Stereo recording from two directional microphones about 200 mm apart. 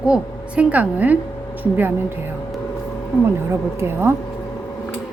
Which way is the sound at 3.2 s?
10° right (ahead or behind).